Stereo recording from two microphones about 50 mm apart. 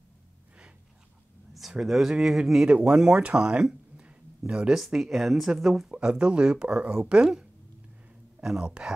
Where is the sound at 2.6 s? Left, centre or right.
Right.